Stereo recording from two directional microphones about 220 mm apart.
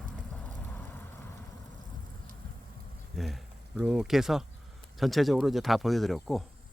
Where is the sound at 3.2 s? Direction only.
Centre (ahead or behind).